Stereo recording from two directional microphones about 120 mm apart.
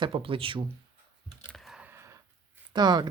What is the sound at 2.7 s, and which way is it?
Speech, 35° right (ahead or behind).